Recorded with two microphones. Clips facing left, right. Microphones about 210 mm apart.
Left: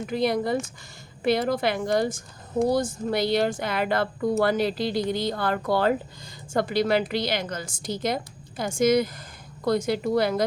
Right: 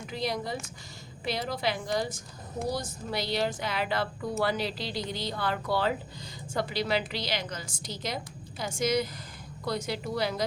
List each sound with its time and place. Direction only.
0.1 s a woman's voice: 55° left (ahead or behind)